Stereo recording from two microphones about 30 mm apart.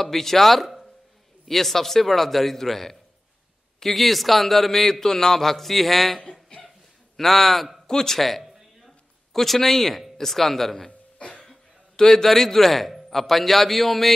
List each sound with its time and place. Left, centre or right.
0.0 s a man's voice: centre
6.5 s cough: left
7.2 s a man's voice: centre
7.8 s speech: centre
8.5 s a sound: centre
9.3 s a man's voice: centre
12.1 s a man's voice: centre